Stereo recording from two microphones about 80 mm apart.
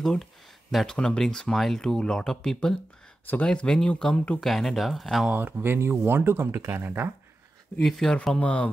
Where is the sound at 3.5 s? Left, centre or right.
Centre.